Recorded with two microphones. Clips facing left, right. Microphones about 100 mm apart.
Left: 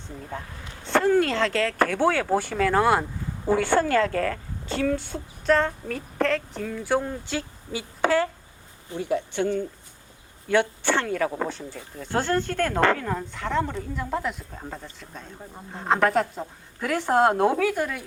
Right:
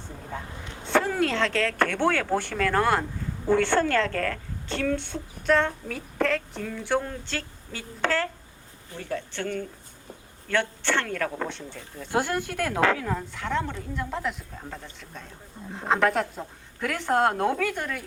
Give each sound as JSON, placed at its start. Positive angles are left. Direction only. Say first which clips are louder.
{"t": 0.3, "sound": "speech", "louder": "right 1 dB", "side_deg": 0}
{"t": 12.1, "sound": "speech", "louder": "left 2 dB", "side_deg": -10}